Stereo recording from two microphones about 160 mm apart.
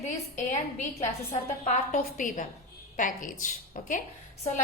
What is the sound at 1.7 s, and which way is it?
A woman's voice, 50° left (ahead or behind).